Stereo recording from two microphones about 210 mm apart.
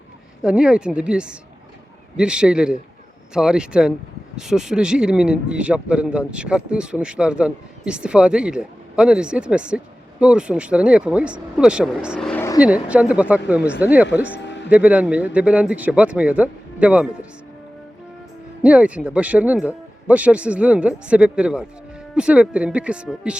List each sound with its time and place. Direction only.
0.4 s speech: 5° right (ahead or behind)
12.3 s vehicle: 10° left (ahead or behind)
12.5 s speech: 5° right (ahead or behind)
14.3 s music: 55° left (ahead or behind)
14.7 s speech: 5° right (ahead or behind)
18.6 s speech: 5° right (ahead or behind)